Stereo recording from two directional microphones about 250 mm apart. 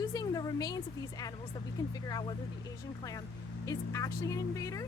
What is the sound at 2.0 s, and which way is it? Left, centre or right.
Speech, centre.